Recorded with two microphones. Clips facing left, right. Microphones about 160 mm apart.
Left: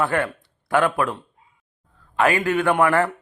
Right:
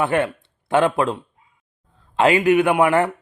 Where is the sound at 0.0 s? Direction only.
20° right (ahead or behind).